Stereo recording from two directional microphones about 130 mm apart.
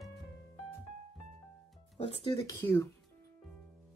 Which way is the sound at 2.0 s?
45° left (ahead or behind).